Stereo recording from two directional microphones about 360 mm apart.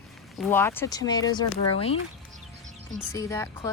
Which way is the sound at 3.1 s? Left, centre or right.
Centre.